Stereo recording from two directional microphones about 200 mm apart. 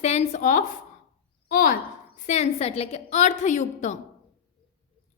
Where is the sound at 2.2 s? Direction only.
35° left (ahead or behind).